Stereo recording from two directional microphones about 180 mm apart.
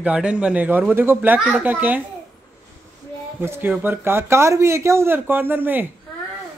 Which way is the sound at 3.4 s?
10° right (ahead or behind).